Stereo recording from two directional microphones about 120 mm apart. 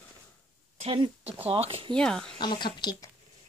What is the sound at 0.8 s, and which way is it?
Speech, 40° right (ahead or behind).